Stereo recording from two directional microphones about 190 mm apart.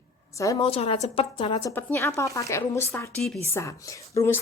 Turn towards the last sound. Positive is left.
turn(degrees=15)  # may be behind; listen again after turning